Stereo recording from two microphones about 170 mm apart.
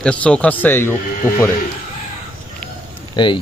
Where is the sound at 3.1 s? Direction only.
30° left (ahead or behind).